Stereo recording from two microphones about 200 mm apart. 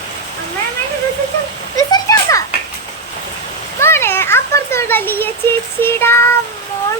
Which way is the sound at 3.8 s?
10° left (ahead or behind).